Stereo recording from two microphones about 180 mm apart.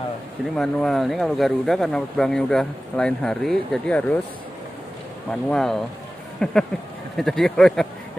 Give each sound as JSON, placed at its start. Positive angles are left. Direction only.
{"t": 0.6, "sound": "speech", "side_deg": 0}
{"t": 5.3, "sound": "speech", "side_deg": 5}